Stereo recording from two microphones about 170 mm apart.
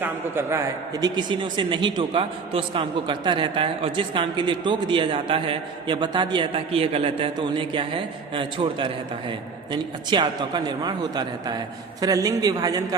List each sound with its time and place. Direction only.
0.0 s a man's voice: 15° right (ahead or behind)
1.0 s a man's voice: 30° right (ahead or behind)
10.1 s a man's voice: 25° right (ahead or behind)